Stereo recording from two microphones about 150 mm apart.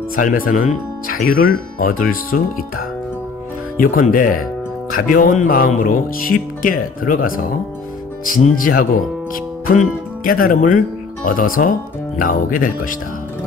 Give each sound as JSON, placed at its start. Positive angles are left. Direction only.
{"t": 0.1, "sound": "speech", "side_deg": 70}
{"t": 3.7, "sound": "speech", "side_deg": 70}
{"t": 8.5, "sound": "speech", "side_deg": 75}